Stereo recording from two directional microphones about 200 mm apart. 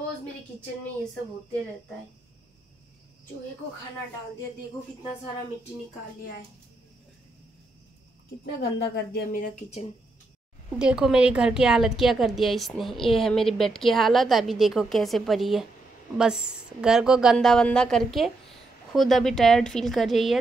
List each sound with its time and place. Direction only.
8.5 s speech: 60° left (ahead or behind)
10.8 s a woman's voice: 5° right (ahead or behind)